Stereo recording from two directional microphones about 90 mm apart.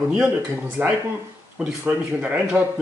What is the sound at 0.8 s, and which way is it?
Speech, 25° right (ahead or behind).